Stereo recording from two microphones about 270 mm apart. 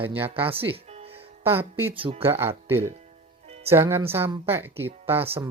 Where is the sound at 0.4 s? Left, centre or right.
Right.